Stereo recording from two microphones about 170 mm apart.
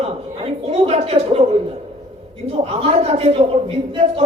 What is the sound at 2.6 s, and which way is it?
A man's voice, 35° right (ahead or behind).